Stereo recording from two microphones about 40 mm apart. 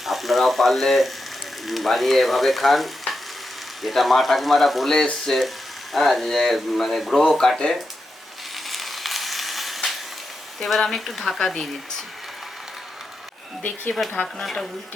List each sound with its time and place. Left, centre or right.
0.0 s frying: centre
1.6 s speech: centre
7.2 s speech: centre
8.5 s a sound: centre
10.6 s speech: centre
13.6 s speech: left
14.4 s speech: centre